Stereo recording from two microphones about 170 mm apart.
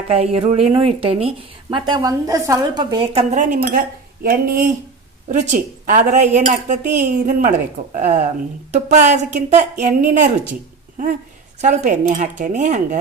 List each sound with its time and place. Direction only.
0.1 s a woman's voice: 35° right (ahead or behind)
3.5 s cutlery: 60° right (ahead or behind)
5.3 s speech: 45° right (ahead or behind)
11.6 s speech: 45° right (ahead or behind)